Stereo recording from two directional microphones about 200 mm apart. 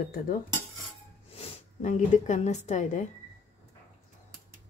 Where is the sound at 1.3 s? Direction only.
35° left (ahead or behind).